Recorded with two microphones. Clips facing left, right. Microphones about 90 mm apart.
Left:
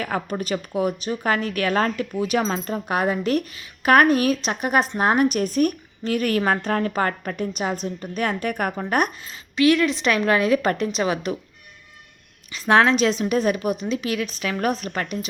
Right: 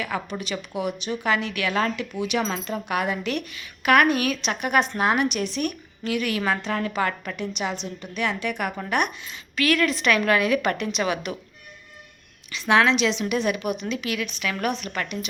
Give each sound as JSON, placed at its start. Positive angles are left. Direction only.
{"t": 0.0, "sound": "speech", "side_deg": 45}
{"t": 12.5, "sound": "speech", "side_deg": 40}